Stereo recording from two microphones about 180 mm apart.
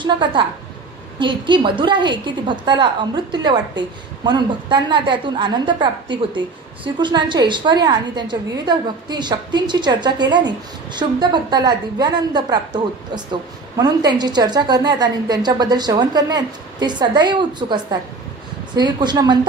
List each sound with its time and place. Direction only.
0.0 s a woman's voice: 25° right (ahead or behind)